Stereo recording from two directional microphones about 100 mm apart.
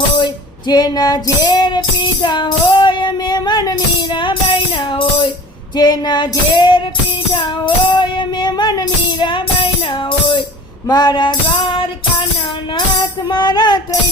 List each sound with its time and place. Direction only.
0.7 s music: 45° left (ahead or behind)
5.7 s music: 45° left (ahead or behind)
10.8 s female singing: 45° left (ahead or behind)
13.2 s music: 45° left (ahead or behind)